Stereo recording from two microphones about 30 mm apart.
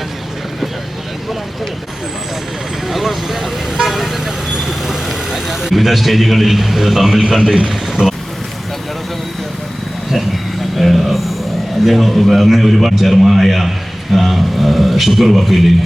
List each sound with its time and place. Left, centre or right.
2.8 s vehicle: centre
5.3 s a man's voice: centre
8.0 s speech: right
10.8 s a sound: centre
11.9 s a man's voice: centre